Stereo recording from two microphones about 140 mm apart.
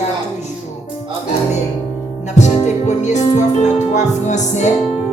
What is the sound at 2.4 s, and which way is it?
Music, 55° left (ahead or behind).